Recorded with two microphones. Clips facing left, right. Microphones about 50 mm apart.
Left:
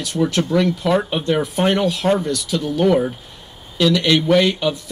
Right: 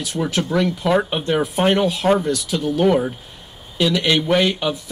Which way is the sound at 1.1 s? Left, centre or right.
Centre.